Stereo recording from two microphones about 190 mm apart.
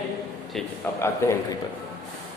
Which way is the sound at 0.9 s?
15° left (ahead or behind).